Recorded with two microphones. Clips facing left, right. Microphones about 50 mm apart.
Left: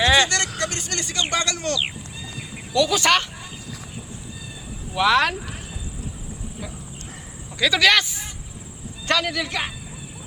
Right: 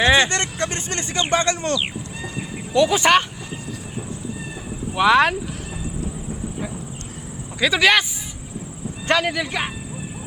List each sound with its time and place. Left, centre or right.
0.0 s speech: right
4.9 s speech: centre
7.6 s speech: centre
9.0 s speech: right